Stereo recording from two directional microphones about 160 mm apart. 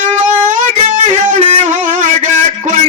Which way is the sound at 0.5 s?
50° right (ahead or behind).